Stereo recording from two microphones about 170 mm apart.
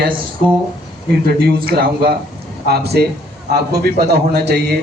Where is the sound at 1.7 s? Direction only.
60° right (ahead or behind).